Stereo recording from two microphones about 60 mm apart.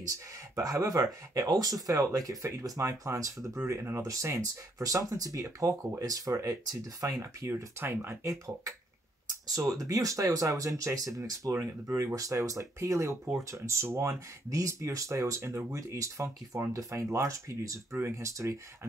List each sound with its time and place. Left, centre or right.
0.1 s speech: right
1.3 s speech: right
7.8 s speech: right
8.2 s speech: right
9.3 s speech: right
12.0 s speech: right